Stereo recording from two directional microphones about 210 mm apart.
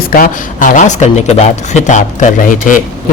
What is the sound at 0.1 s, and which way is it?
Speech, 40° left (ahead or behind).